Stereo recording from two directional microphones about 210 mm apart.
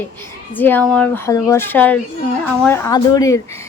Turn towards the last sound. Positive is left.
turn(degrees=15)  # may be behind; listen again after turning